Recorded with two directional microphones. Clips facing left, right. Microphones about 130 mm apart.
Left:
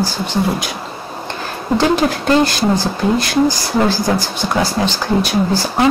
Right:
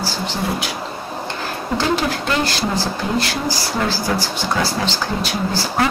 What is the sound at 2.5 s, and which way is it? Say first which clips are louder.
Speech: left 5 dB; 15° left (ahead or behind).